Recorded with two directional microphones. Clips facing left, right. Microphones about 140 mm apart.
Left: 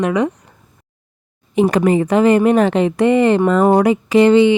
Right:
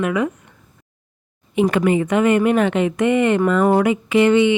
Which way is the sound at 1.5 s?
35° left (ahead or behind).